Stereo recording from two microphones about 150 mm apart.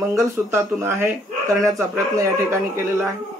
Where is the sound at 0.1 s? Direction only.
20° right (ahead or behind).